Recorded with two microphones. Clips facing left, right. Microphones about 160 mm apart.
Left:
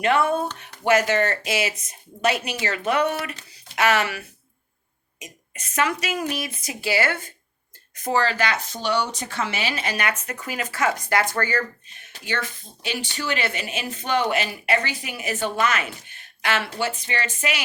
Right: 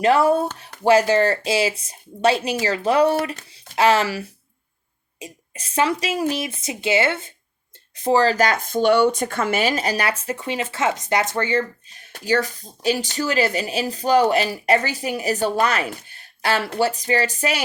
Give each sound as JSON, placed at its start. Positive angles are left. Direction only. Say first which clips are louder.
{"t": 0.0, "sound": "speech", "louder": "right 4 dB", "side_deg": -35}
{"t": 12.1, "sound": "speech", "louder": "right 8 dB", "side_deg": -40}